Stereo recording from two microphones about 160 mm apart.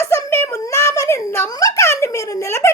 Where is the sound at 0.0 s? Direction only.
15° left (ahead or behind).